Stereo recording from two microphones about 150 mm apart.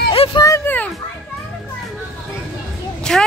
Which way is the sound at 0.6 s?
10° left (ahead or behind).